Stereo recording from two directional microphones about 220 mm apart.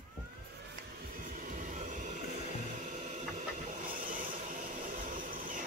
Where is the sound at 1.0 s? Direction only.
40° right (ahead or behind).